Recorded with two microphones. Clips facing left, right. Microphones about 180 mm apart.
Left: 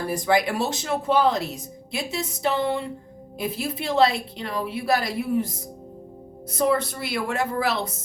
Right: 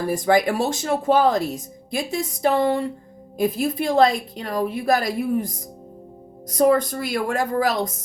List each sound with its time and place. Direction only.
0.3 s a woman's voice: 45° right (ahead or behind)